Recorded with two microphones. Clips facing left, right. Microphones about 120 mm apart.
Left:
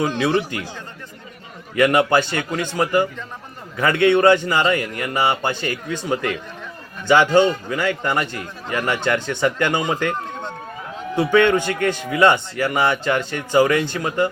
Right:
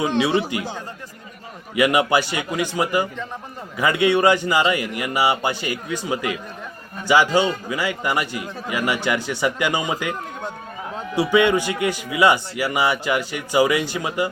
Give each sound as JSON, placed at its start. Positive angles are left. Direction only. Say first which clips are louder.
{"t": 0.0, "sound": "a man's voice", "louder": "even", "side_deg": -20}